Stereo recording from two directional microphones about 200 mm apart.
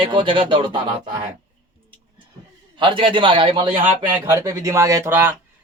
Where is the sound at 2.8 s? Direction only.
25° right (ahead or behind).